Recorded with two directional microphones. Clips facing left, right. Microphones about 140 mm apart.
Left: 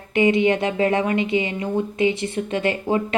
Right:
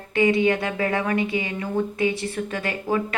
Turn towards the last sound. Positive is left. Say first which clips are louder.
# left 3 dB
turn(degrees=25)  # may be behind; listen again after turning